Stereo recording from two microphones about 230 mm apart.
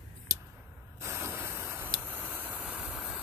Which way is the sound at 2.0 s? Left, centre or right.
Centre.